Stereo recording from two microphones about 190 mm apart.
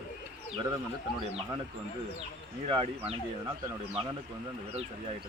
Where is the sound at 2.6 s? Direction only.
30° right (ahead or behind).